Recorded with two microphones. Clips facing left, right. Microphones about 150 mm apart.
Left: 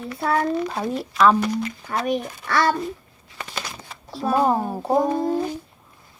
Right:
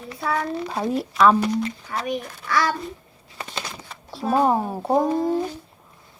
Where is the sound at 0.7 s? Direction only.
Centre (ahead or behind).